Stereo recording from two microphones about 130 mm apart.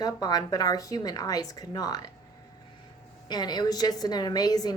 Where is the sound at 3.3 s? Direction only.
30° left (ahead or behind).